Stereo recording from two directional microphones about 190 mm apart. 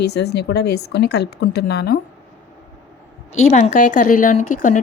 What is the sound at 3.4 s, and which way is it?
A woman's voice, 35° left (ahead or behind).